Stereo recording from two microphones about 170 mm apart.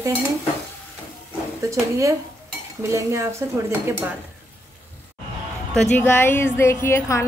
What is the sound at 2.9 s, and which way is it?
Speech, 15° right (ahead or behind).